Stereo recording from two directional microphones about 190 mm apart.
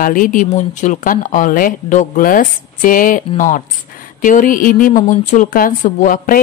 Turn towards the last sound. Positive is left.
turn(degrees=45)  # may be behind; listen again after turning